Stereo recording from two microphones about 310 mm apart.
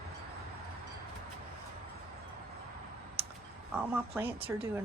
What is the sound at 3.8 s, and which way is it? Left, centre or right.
Speech, centre.